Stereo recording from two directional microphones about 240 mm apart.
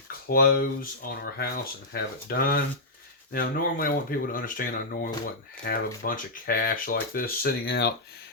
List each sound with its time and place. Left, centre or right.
0.3 s speech: left